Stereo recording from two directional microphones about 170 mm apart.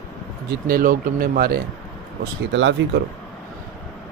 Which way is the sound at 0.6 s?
55° right (ahead or behind).